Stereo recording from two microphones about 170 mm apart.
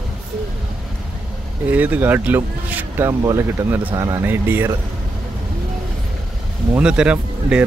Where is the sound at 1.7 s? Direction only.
10° right (ahead or behind).